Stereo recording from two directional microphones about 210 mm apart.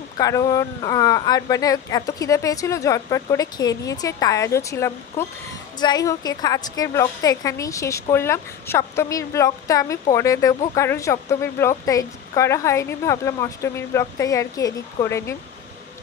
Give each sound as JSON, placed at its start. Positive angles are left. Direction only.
{"t": 0.2, "sound": "a woman's voice", "side_deg": 15}